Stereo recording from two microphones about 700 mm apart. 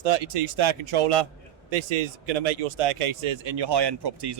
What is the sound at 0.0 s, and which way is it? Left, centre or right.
Speech, right.